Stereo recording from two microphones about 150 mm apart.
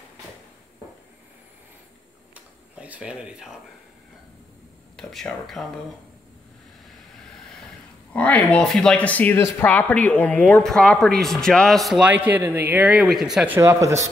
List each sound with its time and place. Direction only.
2.3 s a sound: 10° right (ahead or behind)
4.9 s speech: centre (ahead or behind)
8.1 s speech: 10° left (ahead or behind)
13.6 s speech: 20° right (ahead or behind)